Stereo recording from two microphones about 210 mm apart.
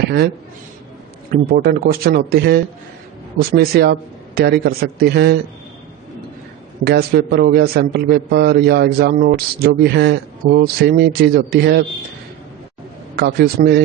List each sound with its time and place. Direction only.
1.3 s a man's voice: 45° right (ahead or behind)
6.8 s a man's voice: 50° right (ahead or behind)
13.1 s a man's voice: 50° right (ahead or behind)